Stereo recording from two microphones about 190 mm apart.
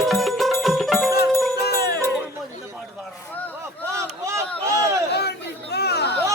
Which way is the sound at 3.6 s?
15° right (ahead or behind).